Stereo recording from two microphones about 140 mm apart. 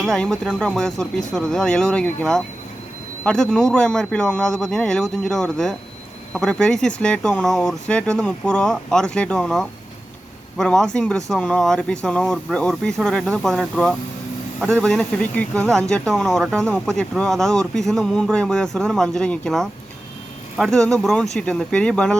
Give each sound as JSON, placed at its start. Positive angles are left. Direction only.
{"t": 0.0, "sound": "speech", "side_deg": 5}